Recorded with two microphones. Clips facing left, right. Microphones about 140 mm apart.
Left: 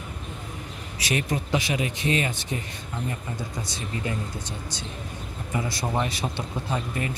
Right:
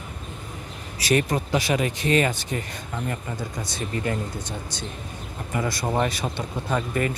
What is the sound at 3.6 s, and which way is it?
Speech, 50° right (ahead or behind).